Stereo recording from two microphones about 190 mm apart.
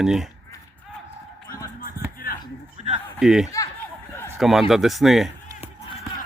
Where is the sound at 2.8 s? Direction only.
35° right (ahead or behind).